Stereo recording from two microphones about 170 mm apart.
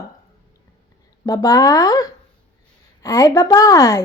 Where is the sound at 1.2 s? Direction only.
20° left (ahead or behind).